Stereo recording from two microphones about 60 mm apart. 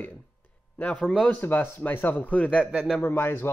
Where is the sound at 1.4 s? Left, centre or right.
Left.